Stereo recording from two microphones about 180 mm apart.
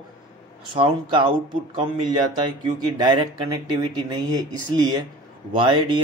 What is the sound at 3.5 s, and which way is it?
Speech, 25° right (ahead or behind).